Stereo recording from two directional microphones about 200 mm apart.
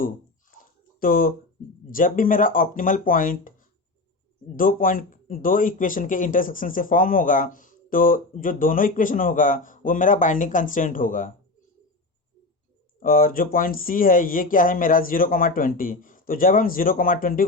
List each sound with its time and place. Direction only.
0.6 s a sound: 45° left (ahead or behind)
1.9 s speech: 45° left (ahead or behind)
4.5 s speech: 45° left (ahead or behind)
13.0 s speech: 45° left (ahead or behind)